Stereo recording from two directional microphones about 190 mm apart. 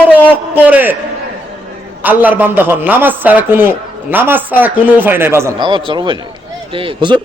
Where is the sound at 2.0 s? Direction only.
10° right (ahead or behind).